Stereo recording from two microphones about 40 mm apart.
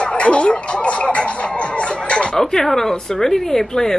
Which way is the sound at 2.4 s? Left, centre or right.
Centre.